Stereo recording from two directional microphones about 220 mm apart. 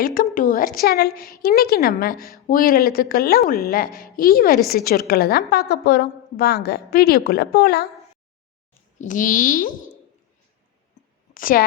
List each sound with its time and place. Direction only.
0.0 s a sound: 40° left (ahead or behind)
1.4 s a woman's voice: 45° left (ahead or behind)
9.0 s speech: 35° left (ahead or behind)
11.3 s a woman's voice: 40° left (ahead or behind)